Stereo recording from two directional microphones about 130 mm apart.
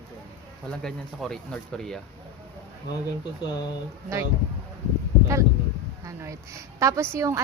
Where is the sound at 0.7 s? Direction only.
5° left (ahead or behind).